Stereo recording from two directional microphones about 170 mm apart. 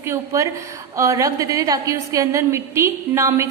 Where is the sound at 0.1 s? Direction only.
20° right (ahead or behind).